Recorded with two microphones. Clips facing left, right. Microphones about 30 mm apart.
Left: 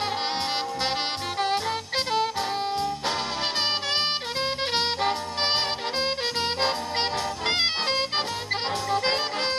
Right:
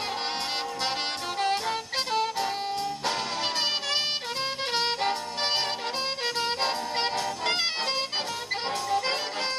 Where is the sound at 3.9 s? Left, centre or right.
Left.